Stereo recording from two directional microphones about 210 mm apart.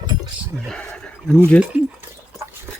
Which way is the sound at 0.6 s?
5° left (ahead or behind).